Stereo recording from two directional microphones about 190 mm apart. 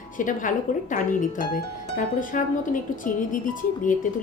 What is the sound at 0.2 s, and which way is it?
A woman's voice, 45° left (ahead or behind).